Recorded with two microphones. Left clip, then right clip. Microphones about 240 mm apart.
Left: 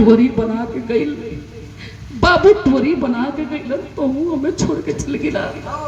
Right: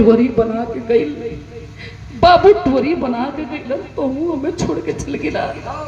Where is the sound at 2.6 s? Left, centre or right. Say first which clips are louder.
Even; centre.